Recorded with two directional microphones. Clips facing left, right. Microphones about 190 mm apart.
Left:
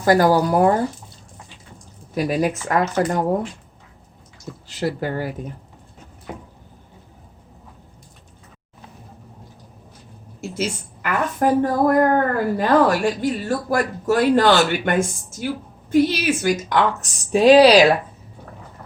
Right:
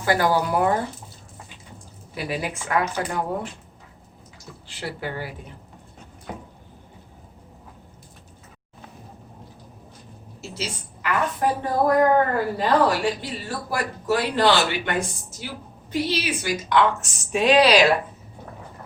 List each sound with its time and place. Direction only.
0.0 s a woman's voice: 40° left (ahead or behind)
2.1 s speech: 45° left (ahead or behind)
4.7 s speech: 40° left (ahead or behind)
10.5 s a woman's voice: 50° left (ahead or behind); by 17.8 s 35° left (ahead or behind)